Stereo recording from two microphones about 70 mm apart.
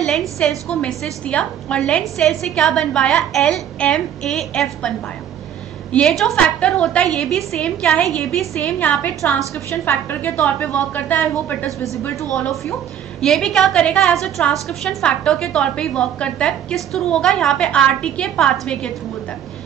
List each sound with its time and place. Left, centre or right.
0.0 s a woman's voice: centre
6.3 s a woman's voice: centre
9.2 s a woman's voice: left
13.2 s a woman's voice: centre